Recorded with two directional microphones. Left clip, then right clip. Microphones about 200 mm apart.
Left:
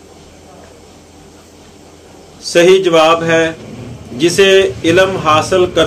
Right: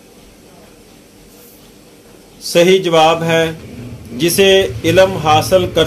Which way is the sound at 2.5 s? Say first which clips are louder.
Left 2 dB; 35° right (ahead or behind).